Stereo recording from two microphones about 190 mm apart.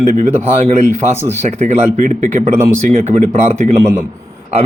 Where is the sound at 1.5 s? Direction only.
35° right (ahead or behind).